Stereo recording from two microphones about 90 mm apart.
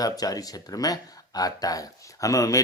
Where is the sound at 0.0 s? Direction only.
45° left (ahead or behind).